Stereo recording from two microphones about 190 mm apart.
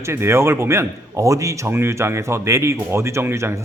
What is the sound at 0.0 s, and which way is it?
A man's voice, 15° right (ahead or behind).